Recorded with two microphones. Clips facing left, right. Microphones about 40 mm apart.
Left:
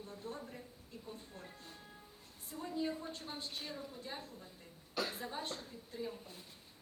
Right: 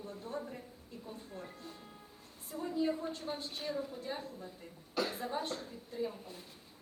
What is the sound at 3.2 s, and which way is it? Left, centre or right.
A woman's voice, centre.